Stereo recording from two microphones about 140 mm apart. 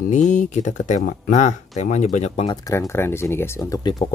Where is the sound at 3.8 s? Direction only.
30° left (ahead or behind).